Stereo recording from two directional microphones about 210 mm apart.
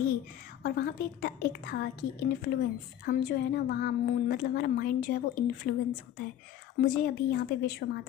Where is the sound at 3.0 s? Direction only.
45° left (ahead or behind).